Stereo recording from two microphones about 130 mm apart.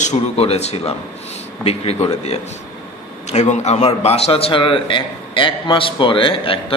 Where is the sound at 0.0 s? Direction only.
60° left (ahead or behind).